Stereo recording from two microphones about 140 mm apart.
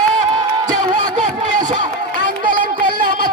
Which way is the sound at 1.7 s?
65° right (ahead or behind).